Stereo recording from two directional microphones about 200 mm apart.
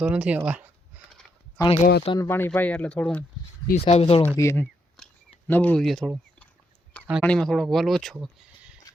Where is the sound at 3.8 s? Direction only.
30° left (ahead or behind).